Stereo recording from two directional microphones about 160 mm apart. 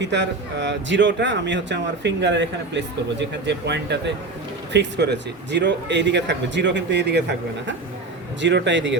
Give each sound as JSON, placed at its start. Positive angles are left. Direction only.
{"t": 0.0, "sound": "speech", "side_deg": -90}
{"t": 8.4, "sound": "speech", "side_deg": -90}